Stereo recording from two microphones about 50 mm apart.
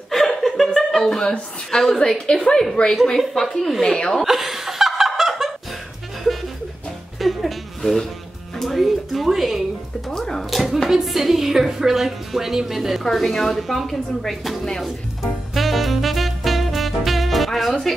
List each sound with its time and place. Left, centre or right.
0.1 s chuckle: centre
0.7 s a woman's voice: centre
4.2 s snicker: centre
7.2 s a sound: centre
8.5 s music: centre
10.1 s music: centre
10.5 s hands: centre
10.9 s a woman's voice: centre
15.5 s music: centre